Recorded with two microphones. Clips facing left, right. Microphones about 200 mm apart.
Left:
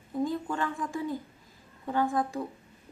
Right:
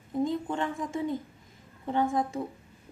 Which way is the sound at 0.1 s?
20° right (ahead or behind).